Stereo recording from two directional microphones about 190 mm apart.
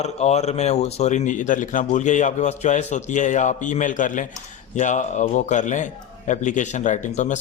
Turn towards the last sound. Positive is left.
turn(degrees=40)  # may be behind; listen again after turning